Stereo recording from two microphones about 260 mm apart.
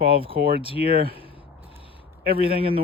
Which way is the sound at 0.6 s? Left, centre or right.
Left.